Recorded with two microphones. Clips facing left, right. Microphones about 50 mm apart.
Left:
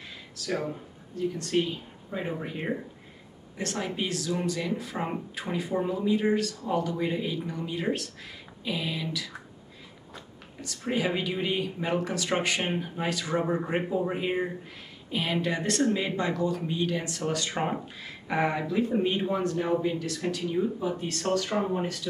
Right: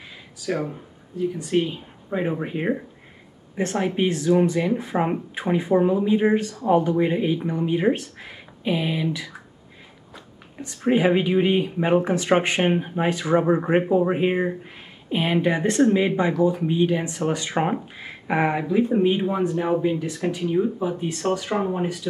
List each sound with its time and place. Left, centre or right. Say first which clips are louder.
0.0 s a sound: right 6 dB; centre
1.1 s speech: right 5 dB; centre
10.6 s speech: right 9 dB; right